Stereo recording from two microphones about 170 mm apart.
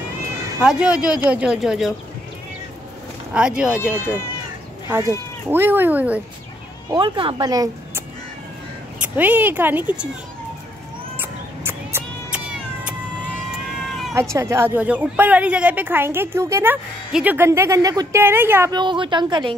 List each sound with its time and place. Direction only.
0.6 s speech: 5° right (ahead or behind)
3.3 s speech: 5° right (ahead or behind)
4.0 s speech: 15° left (ahead or behind)
4.8 s speech: 15° right (ahead or behind)
6.9 s speech: 30° right (ahead or behind)
9.0 s speech: 10° right (ahead or behind)
11.1 s cat: 10° right (ahead or behind)
14.1 s speech: 15° right (ahead or behind)
18.7 s speech: 25° right (ahead or behind)